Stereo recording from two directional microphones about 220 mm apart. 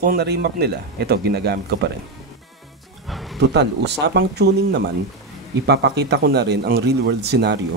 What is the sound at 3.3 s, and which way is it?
Speech, 50° right (ahead or behind).